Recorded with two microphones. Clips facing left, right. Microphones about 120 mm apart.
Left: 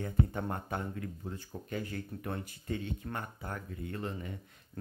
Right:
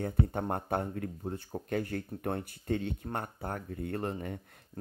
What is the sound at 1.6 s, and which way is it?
Speech, 55° right (ahead or behind).